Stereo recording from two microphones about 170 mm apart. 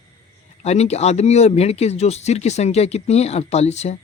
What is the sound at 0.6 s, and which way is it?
Speech, 40° left (ahead or behind).